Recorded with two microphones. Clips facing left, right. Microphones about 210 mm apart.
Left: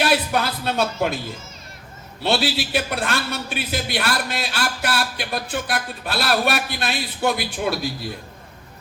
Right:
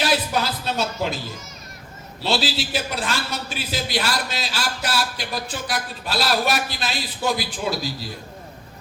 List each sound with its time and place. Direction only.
0.0 s music: 60° left (ahead or behind)
2.2 s a man's voice: 60° left (ahead or behind)